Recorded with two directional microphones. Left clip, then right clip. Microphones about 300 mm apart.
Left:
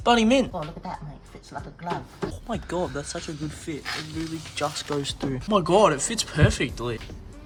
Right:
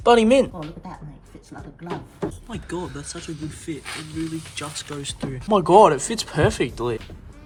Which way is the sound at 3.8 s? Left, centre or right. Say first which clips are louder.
Left 2 dB; centre.